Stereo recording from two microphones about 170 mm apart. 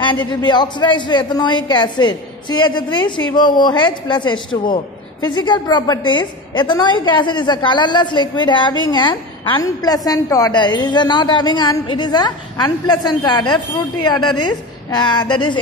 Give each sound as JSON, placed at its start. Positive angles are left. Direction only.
{"t": 0.0, "sound": "a woman's voice", "side_deg": 30}
{"t": 14.9, "sound": "a woman's voice", "side_deg": 25}